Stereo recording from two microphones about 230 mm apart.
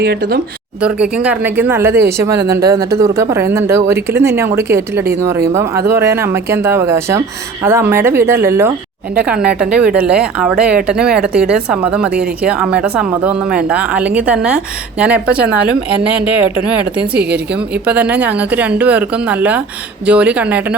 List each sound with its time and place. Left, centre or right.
0.0 s speech: right
0.8 s speech: centre
16.9 s speech: centre